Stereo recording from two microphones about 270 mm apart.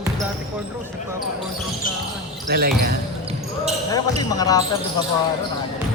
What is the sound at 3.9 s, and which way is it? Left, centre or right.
Speech, centre.